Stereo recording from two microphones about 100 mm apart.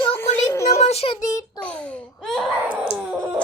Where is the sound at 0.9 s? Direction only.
90° left.